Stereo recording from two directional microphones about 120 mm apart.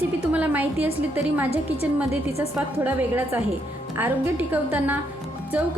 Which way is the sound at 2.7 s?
15° right (ahead or behind).